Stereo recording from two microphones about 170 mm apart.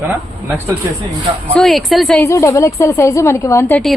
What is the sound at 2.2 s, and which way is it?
A woman's voice, 15° left (ahead or behind).